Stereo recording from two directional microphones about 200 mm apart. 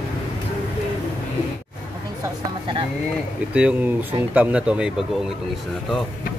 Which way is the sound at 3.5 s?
5° right (ahead or behind).